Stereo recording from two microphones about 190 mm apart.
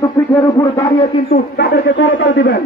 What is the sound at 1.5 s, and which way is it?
A man's voice, 65° left (ahead or behind).